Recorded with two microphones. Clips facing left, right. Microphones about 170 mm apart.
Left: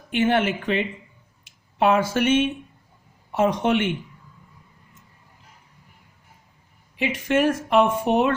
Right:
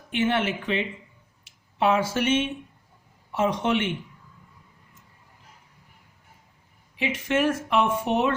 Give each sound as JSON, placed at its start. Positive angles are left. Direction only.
{"t": 0.2, "sound": "speech", "side_deg": 55}
{"t": 7.3, "sound": "speech", "side_deg": 45}